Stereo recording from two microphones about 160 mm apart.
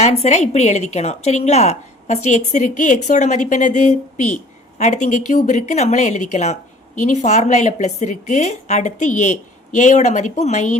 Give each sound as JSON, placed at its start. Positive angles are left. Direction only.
{"t": 0.0, "sound": "a woman's voice", "side_deg": 45}